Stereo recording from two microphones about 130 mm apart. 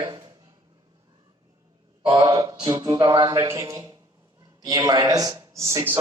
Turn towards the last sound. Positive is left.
turn(degrees=-25)  # may be behind; listen again after turning